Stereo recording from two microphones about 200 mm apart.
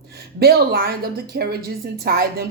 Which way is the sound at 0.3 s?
50° right (ahead or behind).